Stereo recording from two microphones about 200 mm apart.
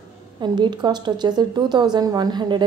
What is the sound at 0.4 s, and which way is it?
A woman's voice, 20° right (ahead or behind).